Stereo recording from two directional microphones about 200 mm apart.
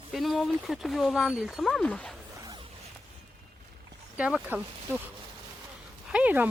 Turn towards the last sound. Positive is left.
turn(degrees=-10)  # may be behind; listen again after turning